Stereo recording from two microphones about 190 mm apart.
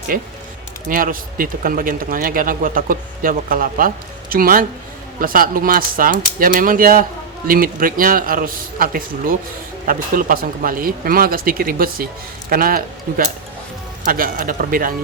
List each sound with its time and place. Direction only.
0.1 s speech: 45° right (ahead or behind)